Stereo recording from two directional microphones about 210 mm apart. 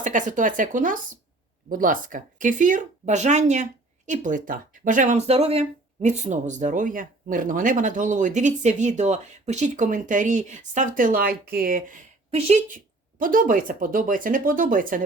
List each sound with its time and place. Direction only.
0.0 s speech: 35° right (ahead or behind)